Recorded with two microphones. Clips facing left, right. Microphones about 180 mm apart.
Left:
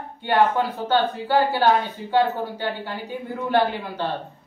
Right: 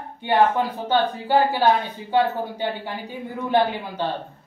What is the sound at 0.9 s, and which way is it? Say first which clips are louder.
Speech: right 1 dB; 15° right (ahead or behind).